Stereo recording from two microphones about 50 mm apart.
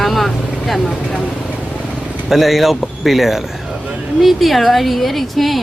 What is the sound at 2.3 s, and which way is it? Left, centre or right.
A woman's voice, centre.